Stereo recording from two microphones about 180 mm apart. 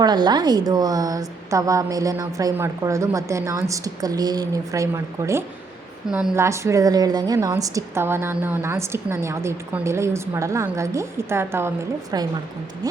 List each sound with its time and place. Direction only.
0.0 s a woman's voice: 25° right (ahead or behind)
6.1 s a woman's voice: 5° right (ahead or behind)
6.3 s a woman's voice: 15° right (ahead or behind)